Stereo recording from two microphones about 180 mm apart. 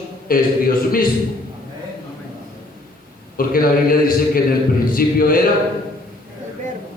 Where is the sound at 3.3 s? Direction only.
55° left (ahead or behind).